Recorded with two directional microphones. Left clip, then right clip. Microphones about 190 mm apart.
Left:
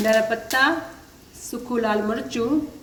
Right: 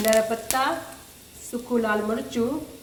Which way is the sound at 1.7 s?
15° left (ahead or behind).